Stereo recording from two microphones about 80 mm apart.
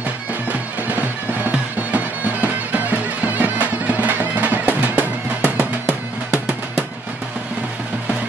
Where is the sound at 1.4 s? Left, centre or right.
Centre.